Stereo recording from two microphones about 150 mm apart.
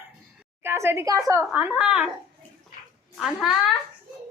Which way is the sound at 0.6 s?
15° right (ahead or behind).